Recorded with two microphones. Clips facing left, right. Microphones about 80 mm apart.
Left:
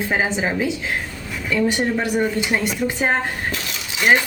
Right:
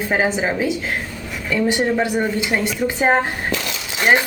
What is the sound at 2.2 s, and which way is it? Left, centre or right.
Speech, centre.